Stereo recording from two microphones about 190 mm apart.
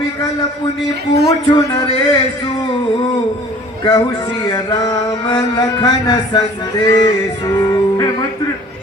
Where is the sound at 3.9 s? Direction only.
25° left (ahead or behind).